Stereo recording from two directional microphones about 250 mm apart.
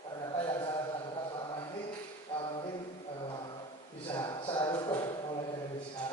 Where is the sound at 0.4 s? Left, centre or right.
Centre.